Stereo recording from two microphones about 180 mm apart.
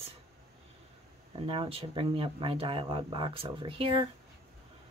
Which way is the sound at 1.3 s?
30° right (ahead or behind).